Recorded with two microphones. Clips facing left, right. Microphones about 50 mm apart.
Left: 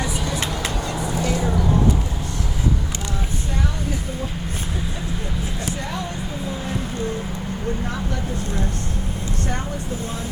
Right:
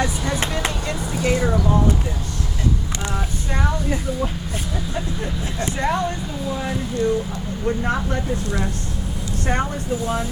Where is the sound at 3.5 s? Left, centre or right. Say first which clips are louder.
Right 5 dB; right.